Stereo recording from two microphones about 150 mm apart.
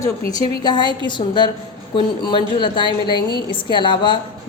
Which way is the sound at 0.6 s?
30° left (ahead or behind).